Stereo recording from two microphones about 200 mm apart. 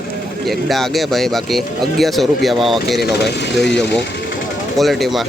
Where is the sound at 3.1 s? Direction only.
55° left (ahead or behind).